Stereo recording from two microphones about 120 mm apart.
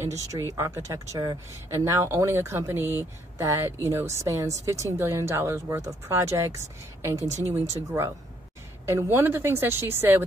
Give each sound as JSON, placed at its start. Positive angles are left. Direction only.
{"t": 0.3, "sound": "speech", "side_deg": -25}